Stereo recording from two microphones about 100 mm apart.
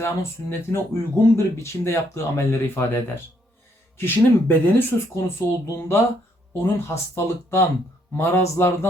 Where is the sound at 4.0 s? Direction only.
20° left (ahead or behind).